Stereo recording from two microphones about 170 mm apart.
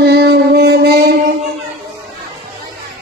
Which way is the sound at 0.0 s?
75° right (ahead or behind).